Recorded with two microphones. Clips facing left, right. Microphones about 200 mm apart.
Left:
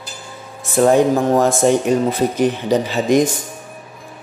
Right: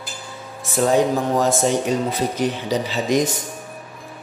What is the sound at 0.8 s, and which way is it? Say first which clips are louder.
A man's voice: left 5 dB; 55° left (ahead or behind).